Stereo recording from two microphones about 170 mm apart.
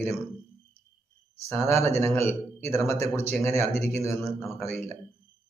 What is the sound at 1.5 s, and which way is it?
Speech, 15° left (ahead or behind).